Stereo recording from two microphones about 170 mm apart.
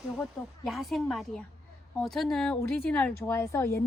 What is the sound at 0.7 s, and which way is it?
Speech, centre (ahead or behind).